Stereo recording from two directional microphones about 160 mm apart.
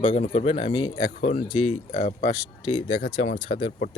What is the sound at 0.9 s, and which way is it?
Speech, 45° left (ahead or behind).